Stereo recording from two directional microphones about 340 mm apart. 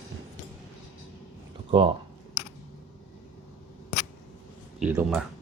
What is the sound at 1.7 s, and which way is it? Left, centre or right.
Speech, centre.